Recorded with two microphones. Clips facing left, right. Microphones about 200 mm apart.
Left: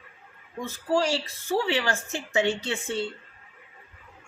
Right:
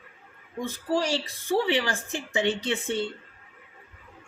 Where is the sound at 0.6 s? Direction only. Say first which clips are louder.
Left 1 dB; 20° right (ahead or behind).